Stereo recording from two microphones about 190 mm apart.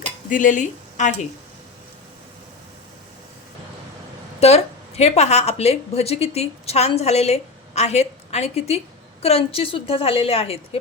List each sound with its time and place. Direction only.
0.3 s speech: 45° left (ahead or behind)
4.4 s a woman's voice: 35° left (ahead or behind)